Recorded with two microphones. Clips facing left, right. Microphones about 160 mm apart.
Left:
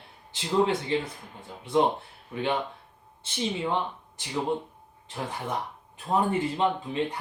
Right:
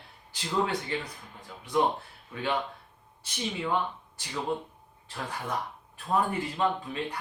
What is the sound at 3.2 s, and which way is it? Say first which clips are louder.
Speech: left 3 dB; 25° left (ahead or behind).